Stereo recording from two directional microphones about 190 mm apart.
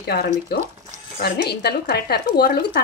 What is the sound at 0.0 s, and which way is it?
Speech, 55° left (ahead or behind).